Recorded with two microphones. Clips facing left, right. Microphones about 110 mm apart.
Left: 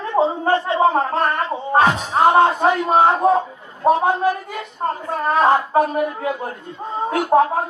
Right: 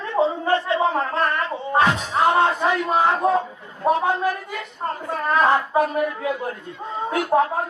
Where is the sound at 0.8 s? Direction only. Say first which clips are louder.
Left 4 dB; 50° left (ahead or behind).